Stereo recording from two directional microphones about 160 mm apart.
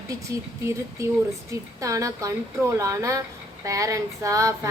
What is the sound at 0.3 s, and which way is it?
A woman's voice, 20° right (ahead or behind).